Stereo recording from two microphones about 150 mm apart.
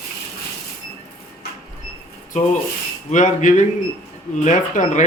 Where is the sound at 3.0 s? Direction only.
55° left (ahead or behind).